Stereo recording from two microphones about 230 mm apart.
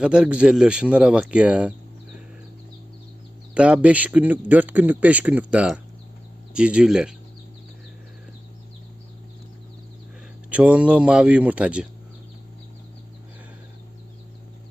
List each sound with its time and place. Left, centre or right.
0.0 s speech: centre
3.5 s a man's voice: centre
10.5 s speech: centre